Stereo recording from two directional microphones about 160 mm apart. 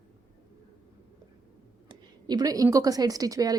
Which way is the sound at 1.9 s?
25° right (ahead or behind).